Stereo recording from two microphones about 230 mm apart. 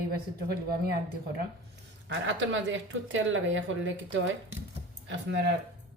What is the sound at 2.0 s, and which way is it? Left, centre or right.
Speech, right.